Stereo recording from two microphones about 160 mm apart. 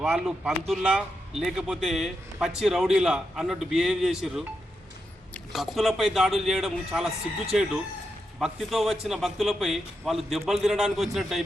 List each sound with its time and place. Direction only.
0.0 s speech: centre (ahead or behind)
8.4 s speech: centre (ahead or behind)